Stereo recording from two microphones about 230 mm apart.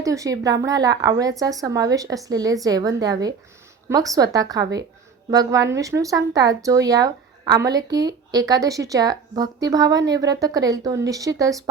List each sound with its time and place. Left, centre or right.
0.0 s a woman's voice: centre